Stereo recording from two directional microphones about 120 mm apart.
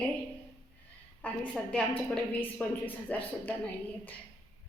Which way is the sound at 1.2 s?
10° left (ahead or behind).